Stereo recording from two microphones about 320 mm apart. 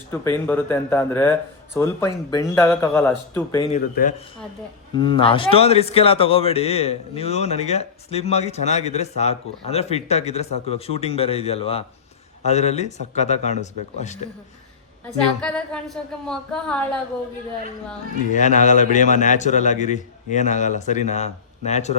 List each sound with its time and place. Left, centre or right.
0.1 s speech: centre
3.7 s a man's voice: left
4.9 s a man's voice: centre
15.0 s a woman's voice: centre
18.3 s a man's voice: left